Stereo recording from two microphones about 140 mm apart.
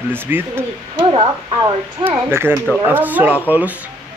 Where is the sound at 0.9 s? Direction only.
35° right (ahead or behind).